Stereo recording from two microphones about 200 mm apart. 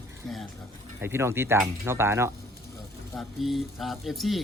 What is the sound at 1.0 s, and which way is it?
Speech, 10° right (ahead or behind).